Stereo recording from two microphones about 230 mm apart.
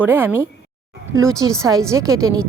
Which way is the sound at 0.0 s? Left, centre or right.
Centre.